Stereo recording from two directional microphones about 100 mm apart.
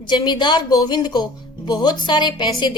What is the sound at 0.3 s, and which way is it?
A woman's voice, 50° left (ahead or behind).